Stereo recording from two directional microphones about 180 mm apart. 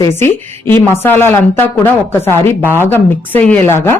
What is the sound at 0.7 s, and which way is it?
Speech, 10° left (ahead or behind).